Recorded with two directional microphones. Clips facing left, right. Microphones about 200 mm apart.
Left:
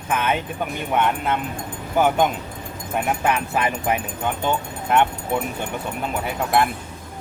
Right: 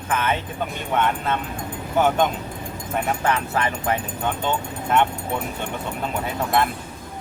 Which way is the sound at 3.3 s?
15° left (ahead or behind).